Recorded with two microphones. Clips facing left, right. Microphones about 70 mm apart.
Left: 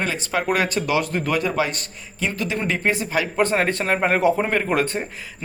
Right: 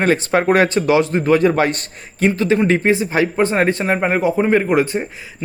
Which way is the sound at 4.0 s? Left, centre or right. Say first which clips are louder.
Right 2 dB; centre.